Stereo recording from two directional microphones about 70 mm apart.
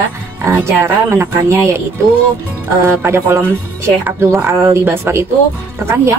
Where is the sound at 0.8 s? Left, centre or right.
Right.